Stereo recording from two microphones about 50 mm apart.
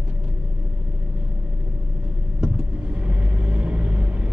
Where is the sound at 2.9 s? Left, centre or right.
Right.